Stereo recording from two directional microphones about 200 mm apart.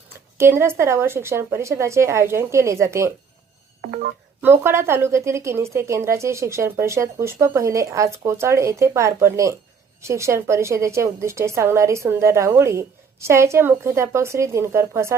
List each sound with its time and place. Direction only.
0.3 s a woman's voice: 10° right (ahead or behind)
3.8 s telephone dialing: 40° right (ahead or behind)
4.4 s a woman's voice: 10° right (ahead or behind)